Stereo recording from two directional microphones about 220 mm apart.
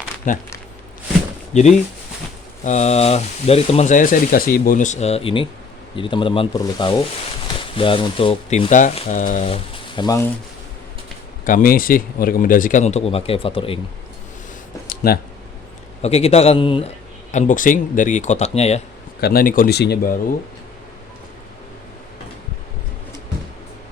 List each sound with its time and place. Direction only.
0.3 s speech: 35° left (ahead or behind)
2.6 s speech: 30° left (ahead or behind)
9.9 s speech: 20° left (ahead or behind)
11.4 s speech: 40° left (ahead or behind)
14.8 s a sound: 45° left (ahead or behind)
16.0 s speech: 30° left (ahead or behind)
17.3 s speech: 35° left (ahead or behind)
19.2 s speech: 40° left (ahead or behind)